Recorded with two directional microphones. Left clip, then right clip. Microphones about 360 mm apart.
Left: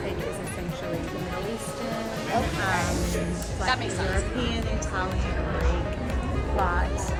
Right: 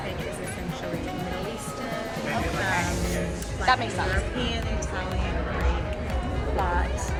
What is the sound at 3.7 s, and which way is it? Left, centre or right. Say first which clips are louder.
Speech: right 4 dB; centre.